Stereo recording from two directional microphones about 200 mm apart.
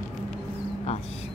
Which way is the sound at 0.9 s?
30° left (ahead or behind).